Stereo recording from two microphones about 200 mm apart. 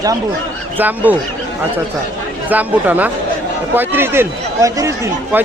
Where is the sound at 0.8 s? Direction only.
10° right (ahead or behind).